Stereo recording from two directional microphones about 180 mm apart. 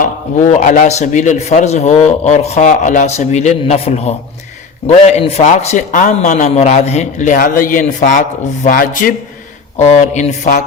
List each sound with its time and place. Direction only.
0.0 s a man's voice: 45° left (ahead or behind)
9.7 s a man's voice: 40° left (ahead or behind)